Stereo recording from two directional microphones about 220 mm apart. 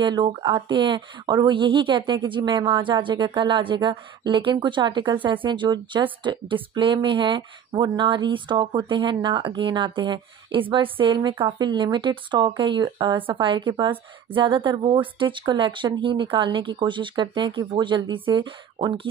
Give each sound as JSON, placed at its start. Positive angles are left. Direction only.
{"t": 0.0, "sound": "speech", "side_deg": -20}